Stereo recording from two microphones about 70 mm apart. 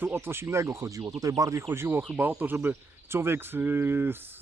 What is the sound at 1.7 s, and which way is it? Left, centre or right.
Speech, right.